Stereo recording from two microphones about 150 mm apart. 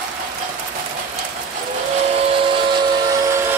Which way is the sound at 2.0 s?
40° right (ahead or behind).